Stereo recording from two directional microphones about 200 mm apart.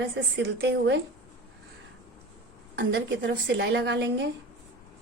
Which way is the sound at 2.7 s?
55° right (ahead or behind).